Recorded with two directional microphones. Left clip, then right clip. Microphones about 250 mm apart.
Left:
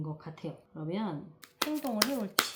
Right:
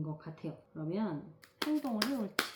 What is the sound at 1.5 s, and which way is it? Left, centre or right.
Speech, left.